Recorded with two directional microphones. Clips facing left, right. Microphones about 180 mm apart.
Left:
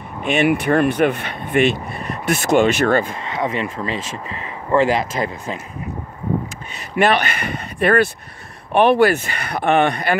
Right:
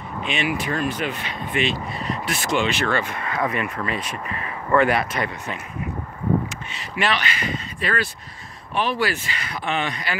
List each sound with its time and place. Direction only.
0.2 s speech: 55° left (ahead or behind)
3.1 s speech: 25° left (ahead or behind)
7.0 s speech: 50° left (ahead or behind)